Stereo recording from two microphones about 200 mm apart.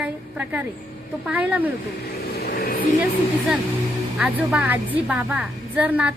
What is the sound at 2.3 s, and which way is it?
Vehicle, 50° left (ahead or behind).